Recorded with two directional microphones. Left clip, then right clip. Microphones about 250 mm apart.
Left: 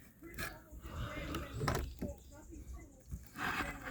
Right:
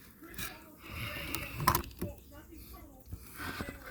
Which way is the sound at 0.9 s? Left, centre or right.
Right.